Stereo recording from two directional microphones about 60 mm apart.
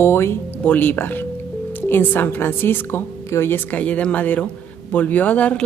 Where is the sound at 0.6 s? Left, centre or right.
Left.